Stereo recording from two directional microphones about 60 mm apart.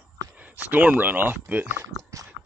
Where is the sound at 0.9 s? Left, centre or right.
Right.